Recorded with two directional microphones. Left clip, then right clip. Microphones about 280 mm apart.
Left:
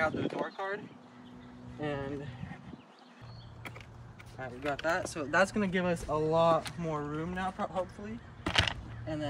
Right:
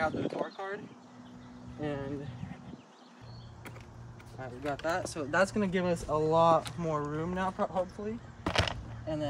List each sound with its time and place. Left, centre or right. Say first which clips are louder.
0.0 s speech: even; centre
4.4 s speech: left 1 dB; centre; by 7.9 s right
8.5 s a sound: left 1 dB; right